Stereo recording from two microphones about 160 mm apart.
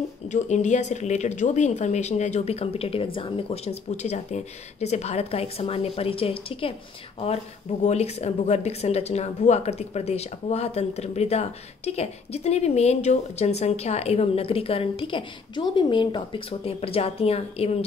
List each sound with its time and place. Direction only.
0.3 s speech: 50° left (ahead or behind)
7.8 s speech: 45° left (ahead or behind)